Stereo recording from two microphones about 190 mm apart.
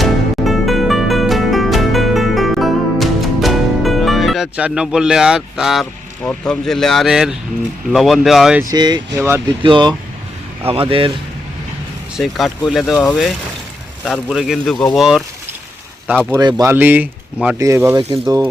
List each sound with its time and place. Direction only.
0.0 s music: centre (ahead or behind)
7.9 s speech: centre (ahead or behind)
8.7 s speech: 20° right (ahead or behind)
9.6 s speech: 25° right (ahead or behind)
12.1 s speech: centre (ahead or behind)
16.4 s speech: 20° right (ahead or behind)